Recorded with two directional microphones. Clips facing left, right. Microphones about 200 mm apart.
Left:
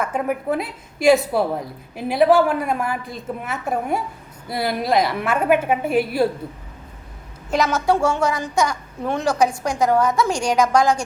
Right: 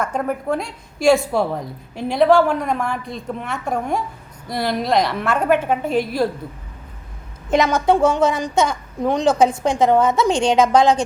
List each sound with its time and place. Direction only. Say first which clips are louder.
0.0 s a woman's voice: even; 5° left (ahead or behind)
7.7 s a woman's voice: right 2 dB; 15° right (ahead or behind)